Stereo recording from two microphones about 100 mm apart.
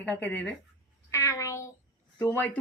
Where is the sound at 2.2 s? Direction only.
25° left (ahead or behind).